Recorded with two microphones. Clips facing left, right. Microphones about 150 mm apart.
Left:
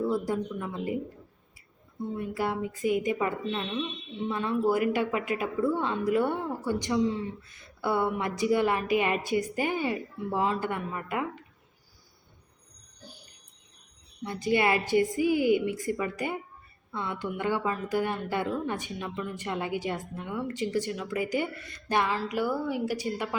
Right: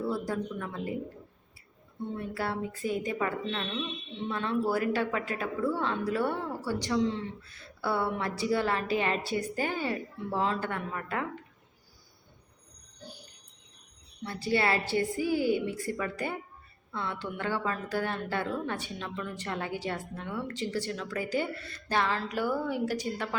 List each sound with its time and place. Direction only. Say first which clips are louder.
0.1 s a woman's voice: left 3 dB; 15° left (ahead or behind)
2.1 s a woman's voice: left 3 dB; 15° left (ahead or behind)
14.3 s a woman's voice: left 3 dB; 15° left (ahead or behind)